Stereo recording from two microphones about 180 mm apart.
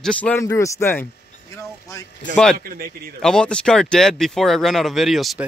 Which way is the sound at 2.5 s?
55° right (ahead or behind).